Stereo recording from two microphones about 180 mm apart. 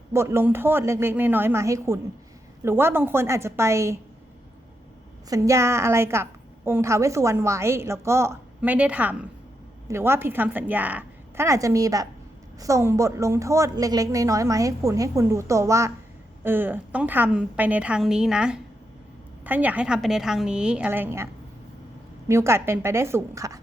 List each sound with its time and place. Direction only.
0.1 s a woman's voice: 15° right (ahead or behind)
5.3 s a woman's voice: 15° right (ahead or behind)
22.3 s a woman's voice: 15° right (ahead or behind)